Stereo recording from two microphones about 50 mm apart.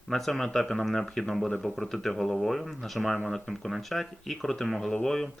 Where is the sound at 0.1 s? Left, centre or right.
Centre.